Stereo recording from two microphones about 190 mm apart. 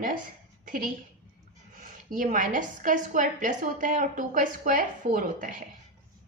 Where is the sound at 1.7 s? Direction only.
45° right (ahead or behind).